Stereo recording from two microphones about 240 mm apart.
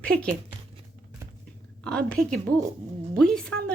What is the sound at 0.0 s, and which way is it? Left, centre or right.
Speech, centre.